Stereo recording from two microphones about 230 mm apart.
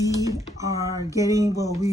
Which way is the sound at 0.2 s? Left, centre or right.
Centre.